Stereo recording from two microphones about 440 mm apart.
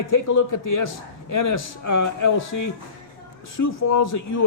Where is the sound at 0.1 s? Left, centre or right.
Left.